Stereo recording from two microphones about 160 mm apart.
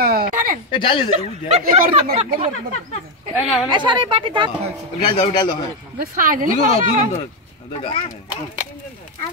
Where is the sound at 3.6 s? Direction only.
30° right (ahead or behind).